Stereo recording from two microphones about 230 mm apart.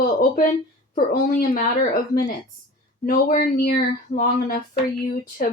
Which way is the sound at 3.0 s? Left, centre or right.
Left.